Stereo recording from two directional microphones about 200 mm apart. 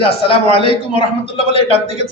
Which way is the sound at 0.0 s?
25° left (ahead or behind).